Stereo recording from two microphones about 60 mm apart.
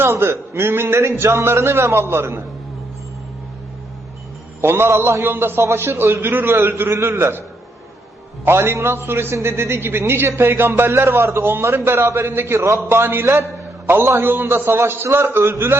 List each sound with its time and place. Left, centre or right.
0.0 s a man's voice: right
4.6 s a man's voice: right
8.4 s a man's voice: right
12.5 s a man's voice: right